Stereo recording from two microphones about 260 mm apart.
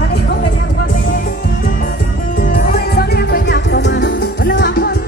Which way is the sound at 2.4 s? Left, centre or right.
Left.